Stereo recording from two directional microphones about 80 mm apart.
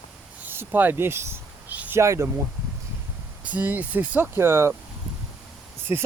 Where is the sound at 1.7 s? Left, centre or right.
Right.